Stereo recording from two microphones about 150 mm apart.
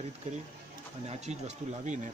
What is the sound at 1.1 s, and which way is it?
Speech, 50° right (ahead or behind).